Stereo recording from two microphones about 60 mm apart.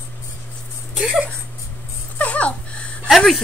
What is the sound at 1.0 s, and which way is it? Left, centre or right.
Speech, centre.